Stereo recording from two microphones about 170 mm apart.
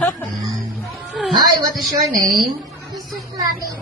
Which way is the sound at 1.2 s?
Centre (ahead or behind).